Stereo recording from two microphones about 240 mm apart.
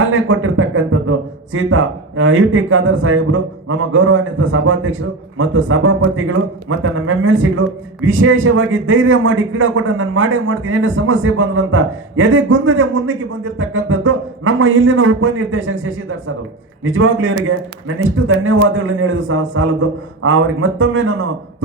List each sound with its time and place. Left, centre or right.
0.0 s beatboxing: right
1.5 s a man's voice: right